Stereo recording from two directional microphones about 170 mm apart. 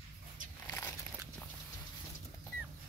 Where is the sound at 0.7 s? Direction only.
10° left (ahead or behind).